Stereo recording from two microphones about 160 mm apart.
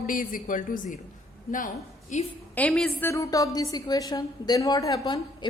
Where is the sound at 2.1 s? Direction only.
50° left (ahead or behind).